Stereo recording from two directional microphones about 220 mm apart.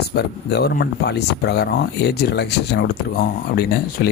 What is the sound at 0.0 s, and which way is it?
Speech, 45° left (ahead or behind).